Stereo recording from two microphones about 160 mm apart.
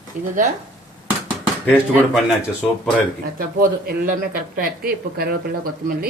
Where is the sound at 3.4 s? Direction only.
60° right (ahead or behind).